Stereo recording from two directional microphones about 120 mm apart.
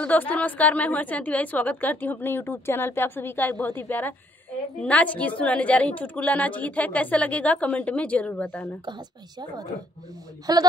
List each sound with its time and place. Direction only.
0.0 s a woman's voice: 15° left (ahead or behind)
10.4 s a man's voice: 35° right (ahead or behind)